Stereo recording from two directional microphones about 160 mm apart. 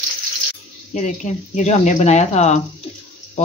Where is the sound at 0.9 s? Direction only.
50° left (ahead or behind).